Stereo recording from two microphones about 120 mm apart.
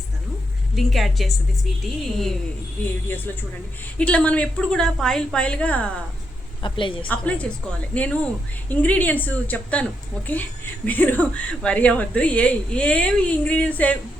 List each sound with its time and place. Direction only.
0.8 s a woman's voice: centre (ahead or behind)
3.1 s speech: 20° left (ahead or behind)
6.6 s a woman's voice: 45° left (ahead or behind)
7.1 s speech: 10° left (ahead or behind)